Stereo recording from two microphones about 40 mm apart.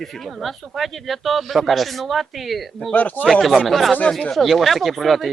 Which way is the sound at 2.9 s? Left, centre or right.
Left.